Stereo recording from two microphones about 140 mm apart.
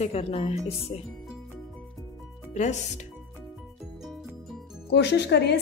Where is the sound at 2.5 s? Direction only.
55° left (ahead or behind).